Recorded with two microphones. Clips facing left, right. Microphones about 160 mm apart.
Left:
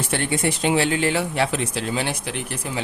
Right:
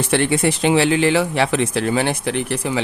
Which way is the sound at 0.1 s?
90° right.